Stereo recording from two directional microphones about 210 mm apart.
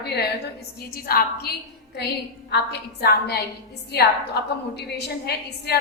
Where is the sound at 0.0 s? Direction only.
50° left (ahead or behind).